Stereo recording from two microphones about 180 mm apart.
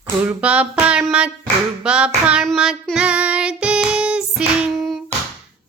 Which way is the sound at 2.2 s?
Centre (ahead or behind).